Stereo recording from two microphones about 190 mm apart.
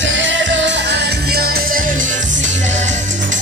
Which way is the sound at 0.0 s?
75° right (ahead or behind).